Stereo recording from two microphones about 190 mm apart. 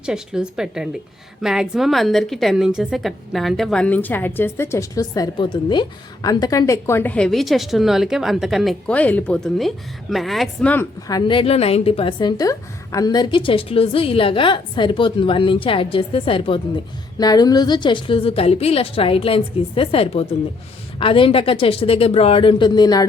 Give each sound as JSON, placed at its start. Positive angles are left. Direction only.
{"t": 0.0, "sound": "a woman's voice", "side_deg": -5}
{"t": 11.1, "sound": "a woman's voice", "side_deg": 25}